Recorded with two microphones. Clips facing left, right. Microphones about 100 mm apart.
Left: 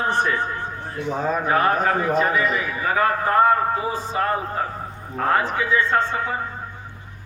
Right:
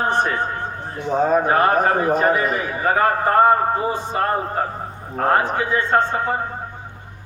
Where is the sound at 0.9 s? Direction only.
35° right (ahead or behind).